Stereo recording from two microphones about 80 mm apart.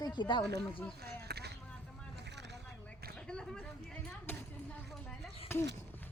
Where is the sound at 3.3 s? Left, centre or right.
Centre.